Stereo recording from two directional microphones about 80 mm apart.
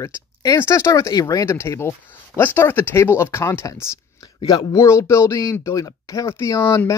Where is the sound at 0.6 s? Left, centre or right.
Left.